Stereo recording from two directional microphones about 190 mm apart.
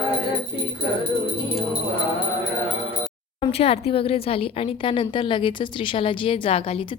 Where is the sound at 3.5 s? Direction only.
30° left (ahead or behind).